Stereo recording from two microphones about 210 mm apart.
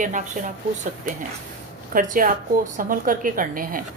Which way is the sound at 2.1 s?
40° right (ahead or behind).